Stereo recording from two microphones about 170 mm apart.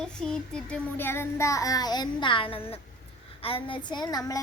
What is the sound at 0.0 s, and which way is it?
Child singing, 5° left (ahead or behind).